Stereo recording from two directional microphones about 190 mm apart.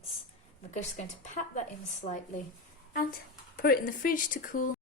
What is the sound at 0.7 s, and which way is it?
A woman's voice, 40° left (ahead or behind).